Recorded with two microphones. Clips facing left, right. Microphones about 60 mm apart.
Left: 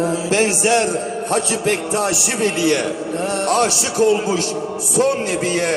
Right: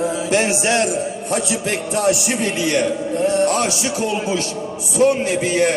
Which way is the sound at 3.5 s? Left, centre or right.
Left.